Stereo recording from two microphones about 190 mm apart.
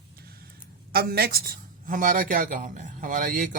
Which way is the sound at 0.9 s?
55° right (ahead or behind).